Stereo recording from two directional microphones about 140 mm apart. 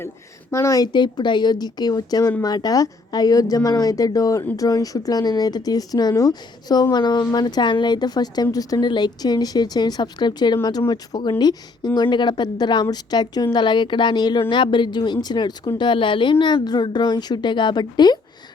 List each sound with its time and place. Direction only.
0.5 s speech: 20° left (ahead or behind)